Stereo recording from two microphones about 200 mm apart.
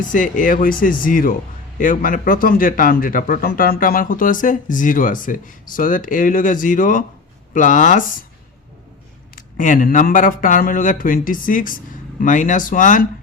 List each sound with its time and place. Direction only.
0.1 s speech: 40° left (ahead or behind)
9.3 s speech: 40° left (ahead or behind)